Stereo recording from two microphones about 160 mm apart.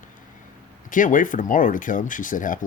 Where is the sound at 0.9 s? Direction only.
55° left (ahead or behind).